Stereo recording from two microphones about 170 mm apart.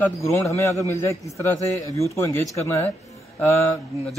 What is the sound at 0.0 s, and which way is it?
Speech, 15° left (ahead or behind).